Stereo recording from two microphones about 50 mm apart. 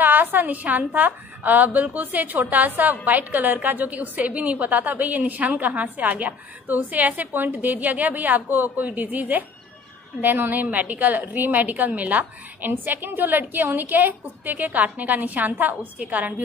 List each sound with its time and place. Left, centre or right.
0.0 s a woman's voice: right